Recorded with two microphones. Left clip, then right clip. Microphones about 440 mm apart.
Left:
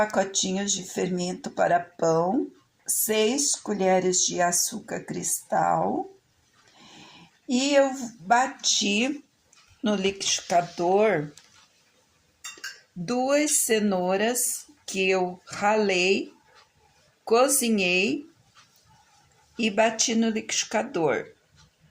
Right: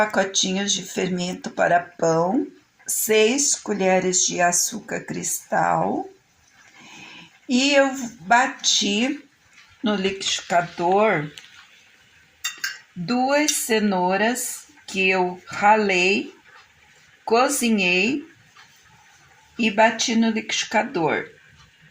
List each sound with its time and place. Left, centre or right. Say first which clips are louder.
0.0 s speech: right 4 dB; left
7.4 s speech: right 3 dB; left
13.1 s speech: right 3 dB; left
17.2 s speech: right 2 dB; left
19.5 s speech: right 5 dB; left